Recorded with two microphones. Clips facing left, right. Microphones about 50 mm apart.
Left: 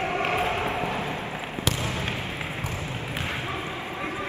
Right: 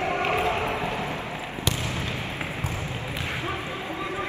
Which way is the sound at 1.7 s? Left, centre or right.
Left.